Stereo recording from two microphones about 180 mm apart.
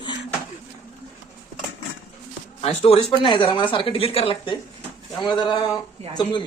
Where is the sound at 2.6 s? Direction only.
35° left (ahead or behind).